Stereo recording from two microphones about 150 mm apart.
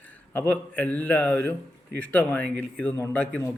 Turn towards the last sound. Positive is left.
turn(degrees=10)  # may be behind; listen again after turning